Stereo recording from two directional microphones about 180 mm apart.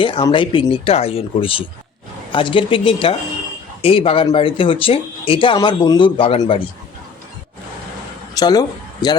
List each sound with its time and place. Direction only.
0.0 s speech: 30° left (ahead or behind)
8.4 s speech: 20° left (ahead or behind)